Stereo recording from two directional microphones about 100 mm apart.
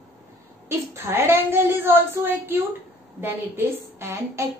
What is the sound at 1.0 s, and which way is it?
A woman's voice, 25° right (ahead or behind).